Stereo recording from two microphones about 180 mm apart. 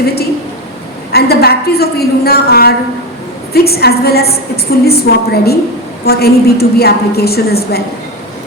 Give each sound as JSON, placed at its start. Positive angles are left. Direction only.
{"t": 1.1, "sound": "a woman's voice", "side_deg": 60}